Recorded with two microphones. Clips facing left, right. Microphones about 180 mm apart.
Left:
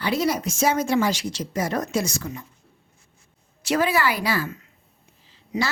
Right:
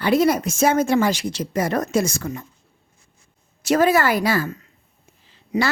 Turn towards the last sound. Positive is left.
turn(degrees=-55)  # may be behind; listen again after turning